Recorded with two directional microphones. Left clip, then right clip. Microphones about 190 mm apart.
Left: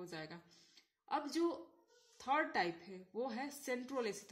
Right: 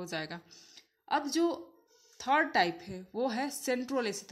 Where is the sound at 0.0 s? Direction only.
35° right (ahead or behind).